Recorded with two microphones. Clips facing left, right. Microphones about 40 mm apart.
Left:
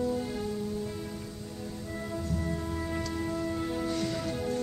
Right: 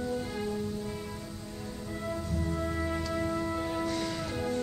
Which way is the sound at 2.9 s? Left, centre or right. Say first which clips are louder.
Right 1 dB; centre.